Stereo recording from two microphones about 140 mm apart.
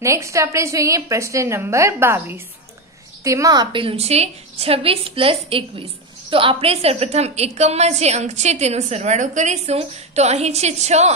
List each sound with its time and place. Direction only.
0.0 s a woman's voice: 20° right (ahead or behind); by 11.1 s 50° right (ahead or behind)